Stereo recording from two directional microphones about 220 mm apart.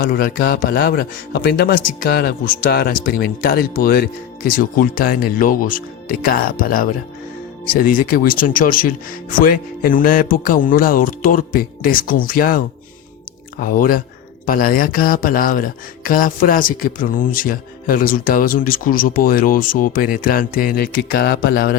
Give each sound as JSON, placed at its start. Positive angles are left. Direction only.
{"t": 0.0, "sound": "speech", "side_deg": 40}